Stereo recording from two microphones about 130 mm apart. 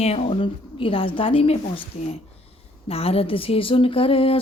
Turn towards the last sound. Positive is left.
turn(degrees=45)  # may be behind; listen again after turning